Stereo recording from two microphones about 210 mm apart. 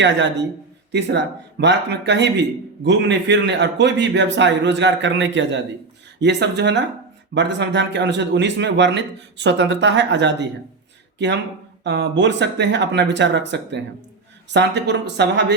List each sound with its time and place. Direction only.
0.0 s a man's voice: 60° right (ahead or behind)
11.8 s a man's voice: 55° right (ahead or behind)